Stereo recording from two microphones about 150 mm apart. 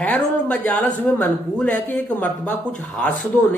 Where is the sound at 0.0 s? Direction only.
10° left (ahead or behind).